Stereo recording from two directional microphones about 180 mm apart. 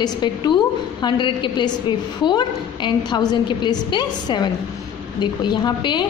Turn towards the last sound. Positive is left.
turn(degrees=25)  # may be behind; listen again after turning